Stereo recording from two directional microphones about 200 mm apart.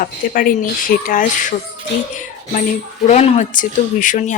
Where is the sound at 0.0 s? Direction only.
45° left (ahead or behind).